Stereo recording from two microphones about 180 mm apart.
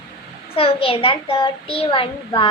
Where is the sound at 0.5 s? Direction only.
30° left (ahead or behind).